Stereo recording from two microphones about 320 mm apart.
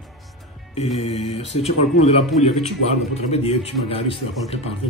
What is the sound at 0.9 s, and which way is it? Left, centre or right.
Speech, centre.